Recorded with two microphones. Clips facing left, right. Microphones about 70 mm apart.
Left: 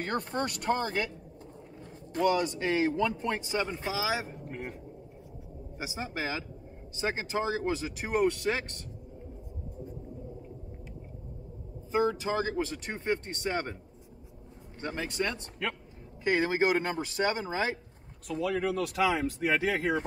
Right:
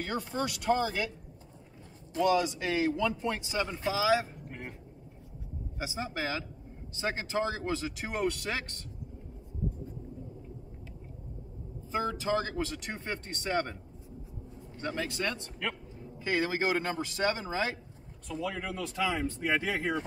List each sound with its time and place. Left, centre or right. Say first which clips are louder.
0.0 s speech: left 2 dB; left
2.6 s speech: left 2 dB; left
4.5 s a sound: left 4 dB; centre
5.8 s speech: even; left
11.9 s speech: left 2 dB; left
14.8 s speech: left 1 dB; centre
18.3 s speech: left 6 dB; left